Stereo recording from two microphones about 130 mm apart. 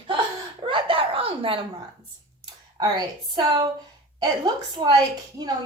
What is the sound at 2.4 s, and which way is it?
A woman's voice, 35° right (ahead or behind).